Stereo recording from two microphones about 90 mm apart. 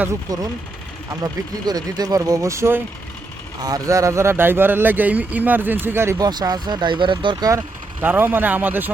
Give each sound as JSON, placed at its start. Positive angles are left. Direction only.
{"t": 1.2, "sound": "speech", "side_deg": -45}
{"t": 3.6, "sound": "speech", "side_deg": -40}
{"t": 6.1, "sound": "speech", "side_deg": -45}
{"t": 8.0, "sound": "speech", "side_deg": -25}